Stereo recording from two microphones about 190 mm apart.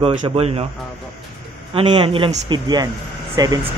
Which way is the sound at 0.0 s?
30° right (ahead or behind).